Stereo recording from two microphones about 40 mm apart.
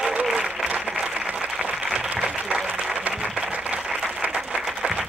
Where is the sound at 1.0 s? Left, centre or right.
Right.